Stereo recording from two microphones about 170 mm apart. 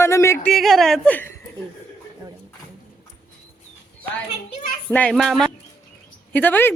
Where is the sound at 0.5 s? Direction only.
Centre (ahead or behind).